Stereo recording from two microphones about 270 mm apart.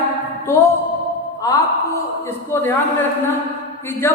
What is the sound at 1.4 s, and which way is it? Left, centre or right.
A woman's voice, centre.